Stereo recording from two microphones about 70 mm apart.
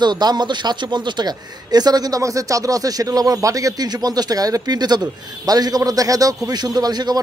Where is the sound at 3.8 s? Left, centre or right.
Right.